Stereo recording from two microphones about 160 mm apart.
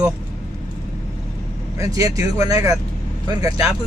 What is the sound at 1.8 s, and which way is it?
Speech, 20° right (ahead or behind).